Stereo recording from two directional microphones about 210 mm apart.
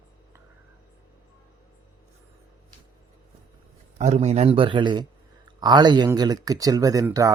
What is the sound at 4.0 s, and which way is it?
A man's voice, 30° right (ahead or behind).